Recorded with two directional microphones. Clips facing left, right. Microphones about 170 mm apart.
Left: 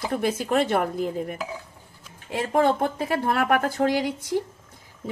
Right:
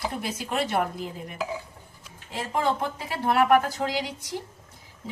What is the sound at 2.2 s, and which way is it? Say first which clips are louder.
Speech: left 5 dB; 55° left (ahead or behind).